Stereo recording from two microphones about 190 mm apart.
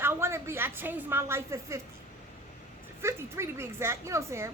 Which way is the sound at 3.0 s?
15° right (ahead or behind).